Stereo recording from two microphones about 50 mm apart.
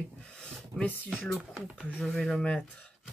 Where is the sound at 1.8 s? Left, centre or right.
Left.